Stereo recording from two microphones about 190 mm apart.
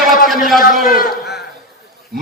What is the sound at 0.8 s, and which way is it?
Speech, 50° left (ahead or behind).